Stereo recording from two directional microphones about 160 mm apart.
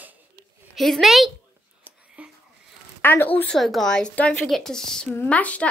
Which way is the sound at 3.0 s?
15° left (ahead or behind).